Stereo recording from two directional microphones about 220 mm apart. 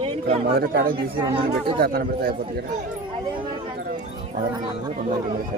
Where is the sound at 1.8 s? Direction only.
40° right (ahead or behind).